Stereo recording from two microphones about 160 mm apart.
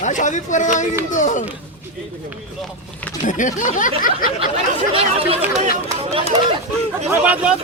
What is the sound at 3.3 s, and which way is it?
Speech, 55° left (ahead or behind).